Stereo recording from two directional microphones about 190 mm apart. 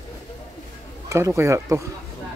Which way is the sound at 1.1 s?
15° right (ahead or behind).